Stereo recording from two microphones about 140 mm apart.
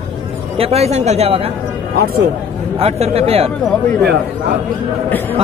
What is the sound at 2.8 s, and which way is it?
Speech, 50° right (ahead or behind).